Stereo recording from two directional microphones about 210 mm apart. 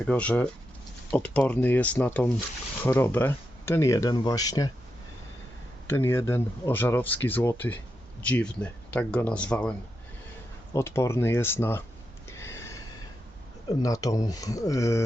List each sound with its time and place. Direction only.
0.1 s speech: 5° left (ahead or behind)
5.9 s speech: 10° left (ahead or behind)
10.8 s speech: 15° left (ahead or behind)
12.3 s a sound: 15° left (ahead or behind)
13.8 s speech: 15° left (ahead or behind)